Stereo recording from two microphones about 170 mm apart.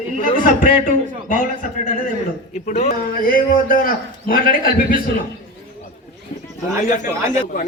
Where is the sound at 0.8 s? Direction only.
55° left (ahead or behind).